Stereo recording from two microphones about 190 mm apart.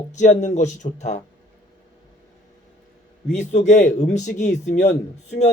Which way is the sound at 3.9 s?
40° left (ahead or behind).